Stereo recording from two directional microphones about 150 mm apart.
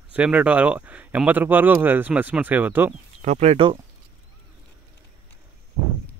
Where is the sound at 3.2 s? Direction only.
50° right (ahead or behind).